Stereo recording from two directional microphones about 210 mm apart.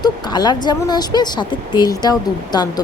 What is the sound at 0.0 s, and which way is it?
A woman's voice, 20° left (ahead or behind).